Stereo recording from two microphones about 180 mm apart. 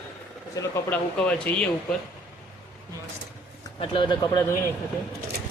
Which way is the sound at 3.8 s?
25° left (ahead or behind).